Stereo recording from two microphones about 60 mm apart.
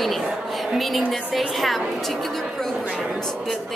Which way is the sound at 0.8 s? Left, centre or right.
Centre.